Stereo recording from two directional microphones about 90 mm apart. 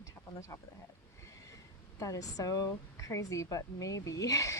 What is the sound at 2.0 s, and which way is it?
Speech, 40° left (ahead or behind).